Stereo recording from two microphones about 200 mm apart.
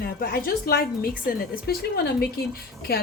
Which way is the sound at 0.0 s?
50° left (ahead or behind).